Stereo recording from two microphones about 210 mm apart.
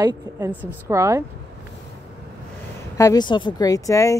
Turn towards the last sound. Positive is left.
turn(degrees=15)  # may be behind; listen again after turning